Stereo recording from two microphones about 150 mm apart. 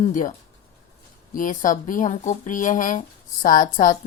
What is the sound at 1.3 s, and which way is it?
Speech, 60° left (ahead or behind).